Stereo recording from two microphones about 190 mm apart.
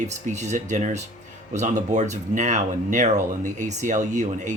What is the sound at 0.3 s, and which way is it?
Speech, 40° right (ahead or behind).